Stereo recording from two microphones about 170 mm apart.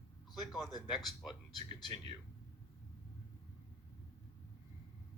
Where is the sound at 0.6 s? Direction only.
25° left (ahead or behind).